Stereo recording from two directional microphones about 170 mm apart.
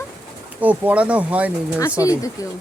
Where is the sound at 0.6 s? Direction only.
10° right (ahead or behind).